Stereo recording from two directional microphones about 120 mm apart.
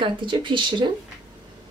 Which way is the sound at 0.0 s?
40° right (ahead or behind).